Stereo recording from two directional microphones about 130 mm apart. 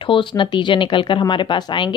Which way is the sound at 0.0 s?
40° left (ahead or behind).